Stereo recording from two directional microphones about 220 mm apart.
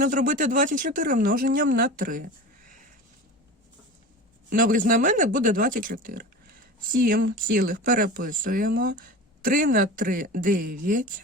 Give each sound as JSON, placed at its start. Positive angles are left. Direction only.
{"t": 0.0, "sound": "speech", "side_deg": -35}
{"t": 4.4, "sound": "speech", "side_deg": -40}